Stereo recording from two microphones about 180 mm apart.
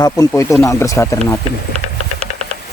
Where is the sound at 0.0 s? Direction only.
20° left (ahead or behind).